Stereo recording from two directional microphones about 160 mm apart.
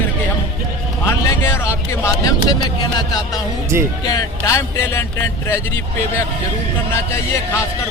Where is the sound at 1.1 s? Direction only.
15° left (ahead or behind).